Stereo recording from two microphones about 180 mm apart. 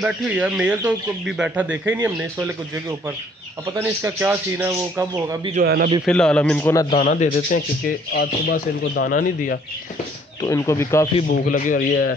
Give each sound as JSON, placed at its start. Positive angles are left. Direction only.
{"t": 0.0, "sound": "speech", "side_deg": -5}
{"t": 6.0, "sound": "a man's voice", "side_deg": 5}
{"t": 7.0, "sound": "speech", "side_deg": 45}
{"t": 8.1, "sound": "speech", "side_deg": 65}
{"t": 10.4, "sound": "a man's voice", "side_deg": 20}
{"t": 11.2, "sound": "speech", "side_deg": 50}